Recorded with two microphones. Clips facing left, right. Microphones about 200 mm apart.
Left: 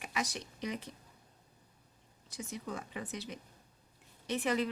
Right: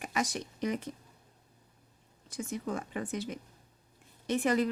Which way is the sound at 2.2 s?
50° right (ahead or behind).